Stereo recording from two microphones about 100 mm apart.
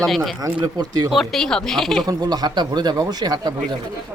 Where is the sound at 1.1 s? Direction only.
Centre (ahead or behind).